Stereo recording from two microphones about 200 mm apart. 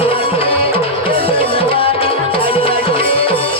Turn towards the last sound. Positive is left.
turn(degrees=30)  # may be behind; listen again after turning